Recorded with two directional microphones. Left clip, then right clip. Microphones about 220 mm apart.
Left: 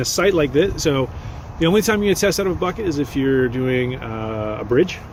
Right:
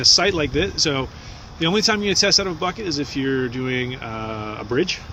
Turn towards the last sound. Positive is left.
turn(degrees=-20)  # may be behind; listen again after turning